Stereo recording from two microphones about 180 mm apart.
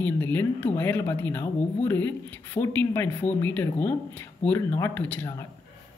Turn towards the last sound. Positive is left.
turn(degrees=15)  # may be behind; listen again after turning